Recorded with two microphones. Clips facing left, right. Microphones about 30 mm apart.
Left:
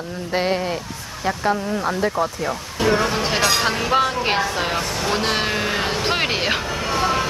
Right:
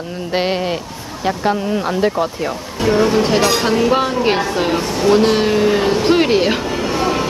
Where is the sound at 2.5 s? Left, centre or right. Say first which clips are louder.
Right 3 dB; centre.